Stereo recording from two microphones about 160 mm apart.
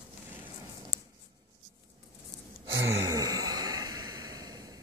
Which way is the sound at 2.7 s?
20° right (ahead or behind).